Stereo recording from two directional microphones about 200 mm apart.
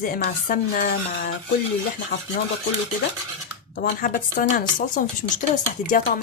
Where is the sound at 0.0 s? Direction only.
45° left (ahead or behind).